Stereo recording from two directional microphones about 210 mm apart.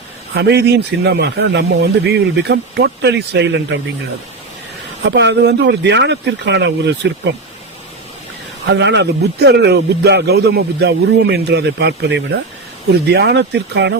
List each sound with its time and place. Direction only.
0.3 s speech: 55° right (ahead or behind)
5.0 s speech: 55° right (ahead or behind)
8.6 s speech: 55° right (ahead or behind)